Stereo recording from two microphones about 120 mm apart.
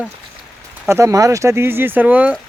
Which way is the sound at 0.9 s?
25° right (ahead or behind).